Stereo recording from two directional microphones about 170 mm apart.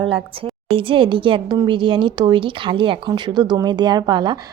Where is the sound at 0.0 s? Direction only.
30° right (ahead or behind).